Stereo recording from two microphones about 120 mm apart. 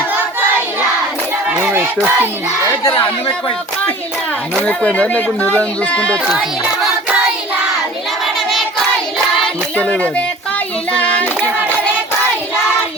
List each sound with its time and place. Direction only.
1.5 s a sound: 15° right (ahead or behind)
4.6 s speech: 10° left (ahead or behind)
9.7 s speech: 10° left (ahead or behind)